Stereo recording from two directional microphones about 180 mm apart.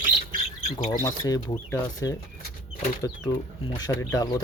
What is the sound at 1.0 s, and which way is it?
Speech, 20° left (ahead or behind).